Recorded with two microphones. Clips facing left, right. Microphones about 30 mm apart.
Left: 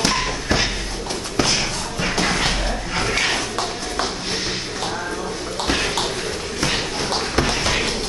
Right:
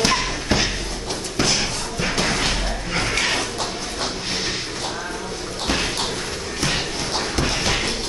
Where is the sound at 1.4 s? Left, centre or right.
Left.